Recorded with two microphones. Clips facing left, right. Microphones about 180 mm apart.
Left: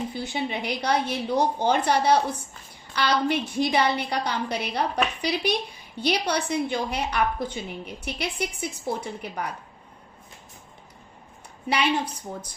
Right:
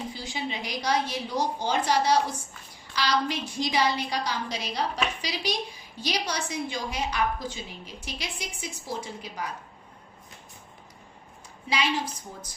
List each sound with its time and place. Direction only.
0.1 s a woman's voice: 60° left (ahead or behind)
11.7 s a woman's voice: 65° left (ahead or behind)